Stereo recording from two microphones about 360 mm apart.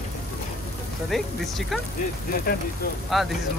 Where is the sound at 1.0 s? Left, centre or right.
Centre.